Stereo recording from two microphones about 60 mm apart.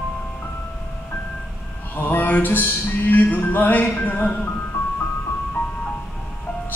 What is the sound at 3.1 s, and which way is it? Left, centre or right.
Music, left.